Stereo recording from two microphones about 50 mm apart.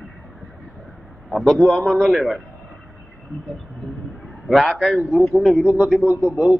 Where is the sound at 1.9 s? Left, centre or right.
Centre.